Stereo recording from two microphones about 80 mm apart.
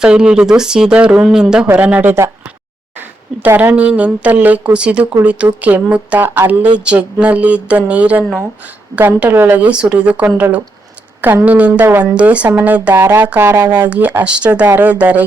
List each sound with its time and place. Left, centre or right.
0.0 s a woman's voice: centre
3.4 s a woman's voice: right